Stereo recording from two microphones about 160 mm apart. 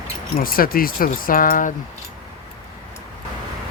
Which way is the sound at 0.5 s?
65° left (ahead or behind).